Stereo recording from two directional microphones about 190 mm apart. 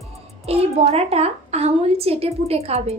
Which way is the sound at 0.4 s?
30° right (ahead or behind).